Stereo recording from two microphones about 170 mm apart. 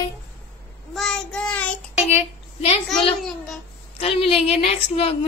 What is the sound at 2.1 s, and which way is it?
Speech, 35° left (ahead or behind).